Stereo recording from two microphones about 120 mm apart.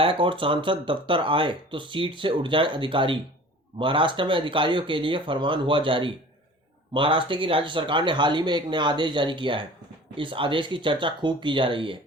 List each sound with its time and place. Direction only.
0.0 s speech: 45° right (ahead or behind)